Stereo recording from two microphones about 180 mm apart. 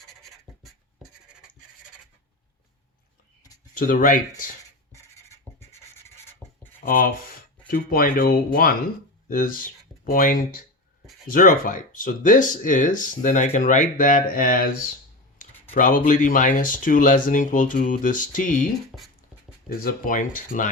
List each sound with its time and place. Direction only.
0.1 s scratch: centre (ahead or behind)
3.8 s speech: 50° left (ahead or behind)
4.9 s writing: 15° left (ahead or behind)
6.8 s speech: 50° left (ahead or behind)
15.7 s speech: 45° left (ahead or behind)
18.9 s writing: centre (ahead or behind)
19.6 s speech: 50° left (ahead or behind)